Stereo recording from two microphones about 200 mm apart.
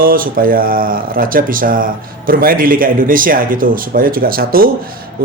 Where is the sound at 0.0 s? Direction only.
45° right (ahead or behind).